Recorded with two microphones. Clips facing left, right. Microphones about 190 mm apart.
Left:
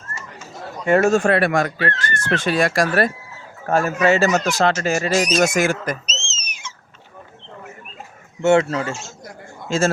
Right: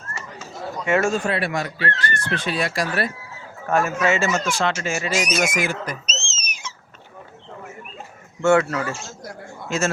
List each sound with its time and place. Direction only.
1.1 s speech: 50° left (ahead or behind)
3.7 s speech: 35° left (ahead or behind)
6.1 s a sound: 45° right (ahead or behind)
8.4 s a man's voice: 25° left (ahead or behind)